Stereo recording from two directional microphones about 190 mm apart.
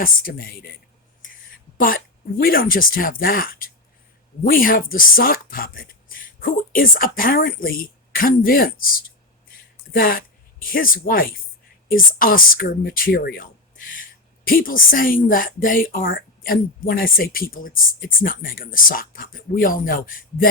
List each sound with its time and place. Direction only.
0.0 s speech: 50° left (ahead or behind)
2.4 s speech: 50° left (ahead or behind)